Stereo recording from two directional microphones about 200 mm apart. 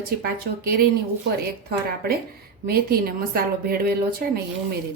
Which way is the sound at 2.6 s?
50° right (ahead or behind).